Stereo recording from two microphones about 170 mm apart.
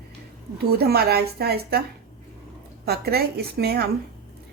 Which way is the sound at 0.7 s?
65° right (ahead or behind).